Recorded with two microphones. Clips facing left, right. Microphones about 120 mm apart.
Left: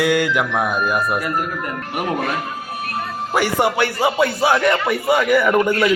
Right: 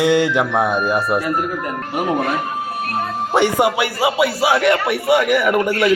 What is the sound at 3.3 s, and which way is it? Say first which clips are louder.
Speech: right 2 dB; 20° right (ahead or behind).